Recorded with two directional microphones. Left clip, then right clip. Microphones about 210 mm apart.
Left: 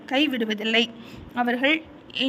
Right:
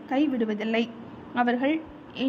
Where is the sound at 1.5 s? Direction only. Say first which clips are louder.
Left 4 dB; 50° left (ahead or behind).